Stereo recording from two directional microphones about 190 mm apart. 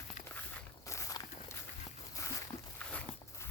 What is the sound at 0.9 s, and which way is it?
Walk, 15° left (ahead or behind).